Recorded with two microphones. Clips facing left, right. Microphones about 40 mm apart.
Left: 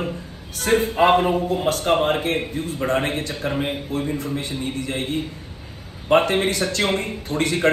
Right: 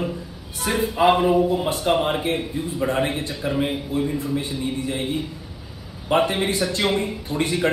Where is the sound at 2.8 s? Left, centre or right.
Left.